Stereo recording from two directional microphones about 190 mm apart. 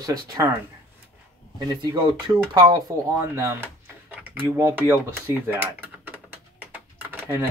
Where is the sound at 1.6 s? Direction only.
20° right (ahead or behind).